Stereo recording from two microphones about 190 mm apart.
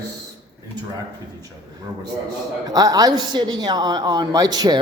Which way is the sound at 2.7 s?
20° right (ahead or behind).